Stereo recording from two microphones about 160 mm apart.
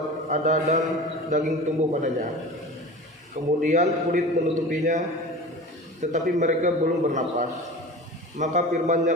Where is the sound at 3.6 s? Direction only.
50° right (ahead or behind).